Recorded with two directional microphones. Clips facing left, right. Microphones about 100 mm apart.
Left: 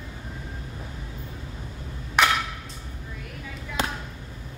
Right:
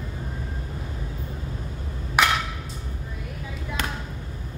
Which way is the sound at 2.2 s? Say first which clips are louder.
Even; 10° right (ahead or behind).